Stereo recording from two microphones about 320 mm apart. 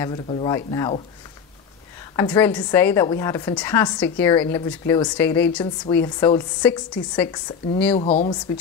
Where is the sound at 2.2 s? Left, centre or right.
Centre.